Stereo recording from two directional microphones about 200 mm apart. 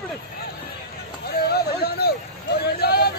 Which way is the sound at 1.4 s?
55° left (ahead or behind).